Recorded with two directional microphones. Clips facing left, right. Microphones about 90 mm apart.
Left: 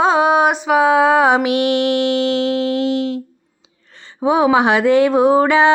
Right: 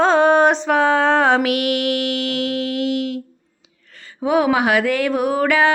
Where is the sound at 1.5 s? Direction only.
25° left (ahead or behind).